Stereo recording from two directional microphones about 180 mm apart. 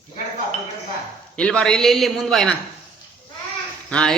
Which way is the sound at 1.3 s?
5° left (ahead or behind).